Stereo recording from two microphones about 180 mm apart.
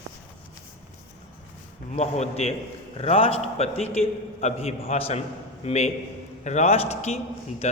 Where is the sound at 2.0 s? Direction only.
35° left (ahead or behind).